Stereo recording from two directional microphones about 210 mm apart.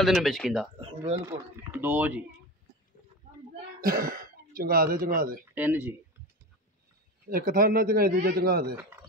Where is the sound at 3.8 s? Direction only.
45° right (ahead or behind).